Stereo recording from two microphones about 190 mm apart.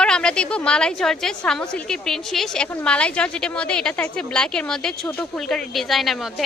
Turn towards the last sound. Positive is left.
turn(degrees=0)  # may be behind; listen again after turning